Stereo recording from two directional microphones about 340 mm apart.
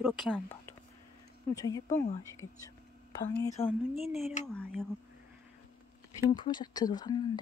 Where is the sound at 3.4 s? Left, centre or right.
Centre.